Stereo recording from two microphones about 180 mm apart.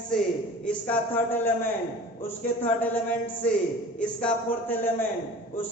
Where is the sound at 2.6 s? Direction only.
10° left (ahead or behind).